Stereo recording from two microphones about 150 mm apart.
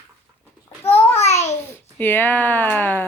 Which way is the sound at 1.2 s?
45° left (ahead or behind).